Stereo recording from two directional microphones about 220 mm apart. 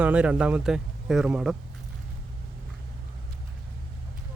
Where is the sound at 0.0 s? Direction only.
5° right (ahead or behind).